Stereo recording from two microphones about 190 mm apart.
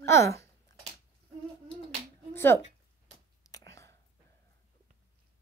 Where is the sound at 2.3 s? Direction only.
10° left (ahead or behind).